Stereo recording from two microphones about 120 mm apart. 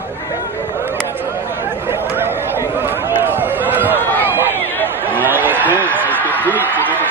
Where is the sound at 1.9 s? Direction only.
20° right (ahead or behind).